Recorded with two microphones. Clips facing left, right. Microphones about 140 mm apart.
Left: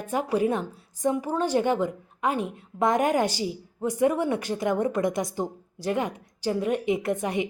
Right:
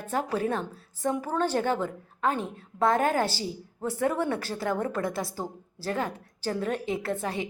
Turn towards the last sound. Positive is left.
turn(degrees=20)  # may be behind; listen again after turning